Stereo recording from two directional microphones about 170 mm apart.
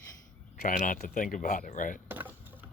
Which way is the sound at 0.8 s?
50° left (ahead or behind).